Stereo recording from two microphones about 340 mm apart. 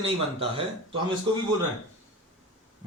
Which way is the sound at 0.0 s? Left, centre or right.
Centre.